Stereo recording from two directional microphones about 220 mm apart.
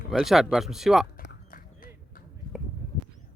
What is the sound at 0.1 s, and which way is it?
Speech, centre (ahead or behind).